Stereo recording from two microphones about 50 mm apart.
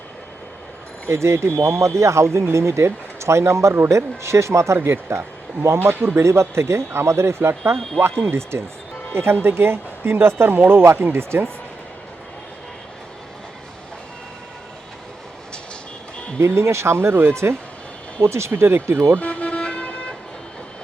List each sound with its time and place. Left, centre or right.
1.0 s speech: right
6.2 s speech: right
9.3 s speech: right
16.4 s speech: right
18.2 s speech: right
19.2 s vehicle: left